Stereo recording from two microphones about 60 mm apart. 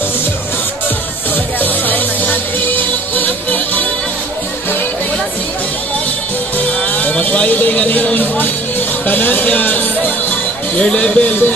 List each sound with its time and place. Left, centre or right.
1.6 s music: left
7.0 s music: left
10.8 s speech: centre